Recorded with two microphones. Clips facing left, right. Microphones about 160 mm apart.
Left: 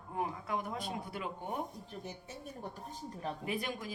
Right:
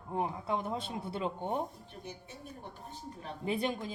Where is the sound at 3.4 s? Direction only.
30° right (ahead or behind).